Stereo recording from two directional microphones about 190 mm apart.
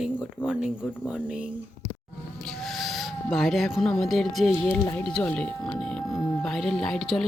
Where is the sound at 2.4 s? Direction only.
Centre (ahead or behind).